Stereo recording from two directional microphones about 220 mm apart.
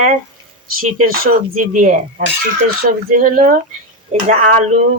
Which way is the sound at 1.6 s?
35° right (ahead or behind).